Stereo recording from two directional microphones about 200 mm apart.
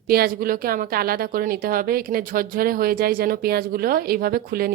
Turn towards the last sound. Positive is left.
turn(degrees=-50)  # may be behind; listen again after turning